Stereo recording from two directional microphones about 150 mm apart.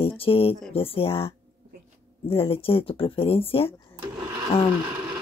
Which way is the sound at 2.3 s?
40° left (ahead or behind).